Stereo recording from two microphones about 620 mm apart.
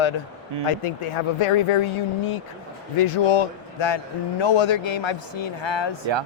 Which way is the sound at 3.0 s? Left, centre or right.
Left.